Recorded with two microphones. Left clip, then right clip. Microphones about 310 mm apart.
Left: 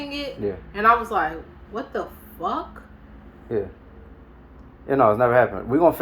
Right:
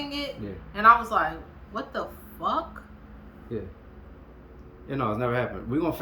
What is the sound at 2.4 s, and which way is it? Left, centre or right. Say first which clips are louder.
Speech: left 1 dB; centre.